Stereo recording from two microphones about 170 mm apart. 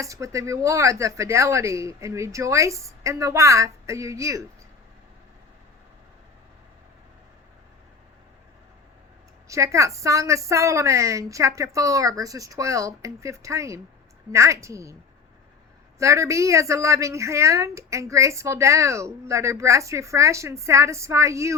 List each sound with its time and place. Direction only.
0.0 s speech: 20° right (ahead or behind)
9.5 s a woman's voice: 20° right (ahead or behind)
16.0 s speech: 20° right (ahead or behind)